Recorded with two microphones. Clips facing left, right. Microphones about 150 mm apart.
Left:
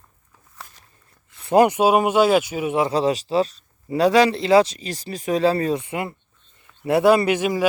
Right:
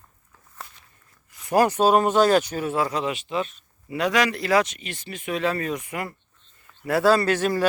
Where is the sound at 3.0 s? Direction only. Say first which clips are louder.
Left 7 dB; 35° left (ahead or behind).